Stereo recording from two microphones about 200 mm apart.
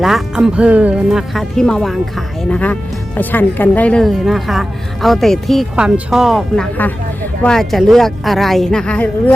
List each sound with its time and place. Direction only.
0.0 s speech: centre (ahead or behind)